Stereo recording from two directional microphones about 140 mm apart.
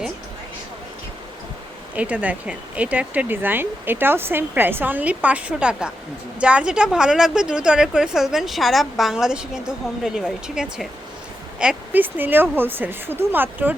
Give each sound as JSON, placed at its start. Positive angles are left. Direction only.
{"t": 2.0, "sound": "a woman's voice", "side_deg": -10}